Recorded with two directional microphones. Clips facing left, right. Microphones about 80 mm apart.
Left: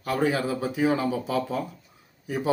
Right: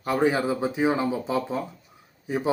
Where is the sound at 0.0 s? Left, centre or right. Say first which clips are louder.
Right 2 dB; right.